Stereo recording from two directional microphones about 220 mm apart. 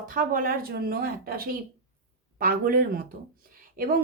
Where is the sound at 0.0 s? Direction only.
40° right (ahead or behind).